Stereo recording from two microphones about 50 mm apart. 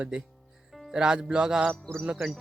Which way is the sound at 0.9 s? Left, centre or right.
Centre.